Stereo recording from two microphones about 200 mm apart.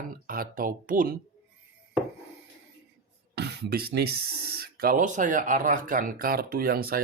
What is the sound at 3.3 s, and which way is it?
Speech, 55° right (ahead or behind).